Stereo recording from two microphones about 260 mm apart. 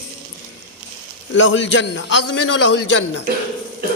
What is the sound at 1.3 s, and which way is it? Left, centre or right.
A man's voice, left.